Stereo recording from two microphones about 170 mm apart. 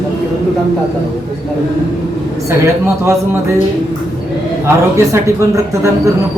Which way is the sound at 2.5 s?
15° right (ahead or behind).